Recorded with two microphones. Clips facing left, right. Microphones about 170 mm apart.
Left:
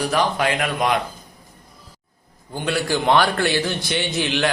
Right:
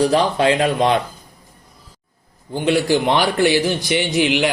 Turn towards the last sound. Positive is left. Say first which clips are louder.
# right 4 dB
turn(degrees=-15)  # may be behind; listen again after turning